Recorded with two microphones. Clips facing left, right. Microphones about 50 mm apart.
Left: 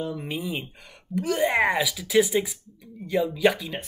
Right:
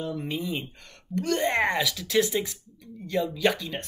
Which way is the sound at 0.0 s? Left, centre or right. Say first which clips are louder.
Left 1 dB; centre.